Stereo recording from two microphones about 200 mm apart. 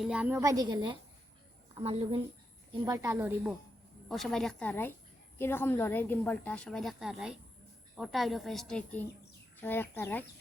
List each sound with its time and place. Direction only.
0.0 s a woman's voice: 5° right (ahead or behind); by 2.2 s 30° right (ahead or behind)
2.8 s a woman's voice: 20° right (ahead or behind)
4.1 s a woman's voice: centre (ahead or behind)